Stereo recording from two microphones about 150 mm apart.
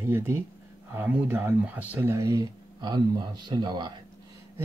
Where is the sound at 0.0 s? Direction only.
15° right (ahead or behind).